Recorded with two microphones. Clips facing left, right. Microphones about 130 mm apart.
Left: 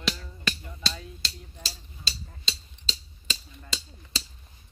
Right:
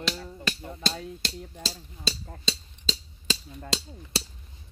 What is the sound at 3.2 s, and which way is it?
Speech, 70° right (ahead or behind).